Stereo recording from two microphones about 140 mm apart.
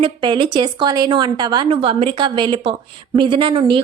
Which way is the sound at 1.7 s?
45° right (ahead or behind).